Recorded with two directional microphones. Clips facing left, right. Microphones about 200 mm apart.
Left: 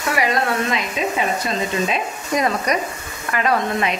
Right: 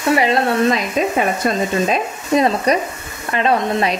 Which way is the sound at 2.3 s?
30° right (ahead or behind).